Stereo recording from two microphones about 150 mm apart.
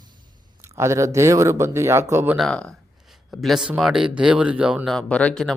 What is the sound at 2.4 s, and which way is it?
Speech, 5° left (ahead or behind).